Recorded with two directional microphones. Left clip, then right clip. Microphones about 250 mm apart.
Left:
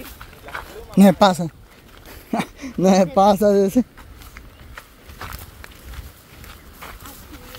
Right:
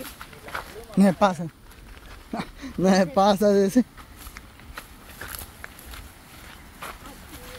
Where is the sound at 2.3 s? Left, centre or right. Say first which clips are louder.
Left 8 dB; left.